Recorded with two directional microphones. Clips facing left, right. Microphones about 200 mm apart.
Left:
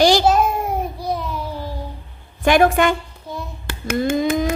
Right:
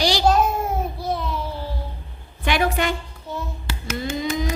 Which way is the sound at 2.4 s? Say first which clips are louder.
Left 7 dB; 45° left (ahead or behind).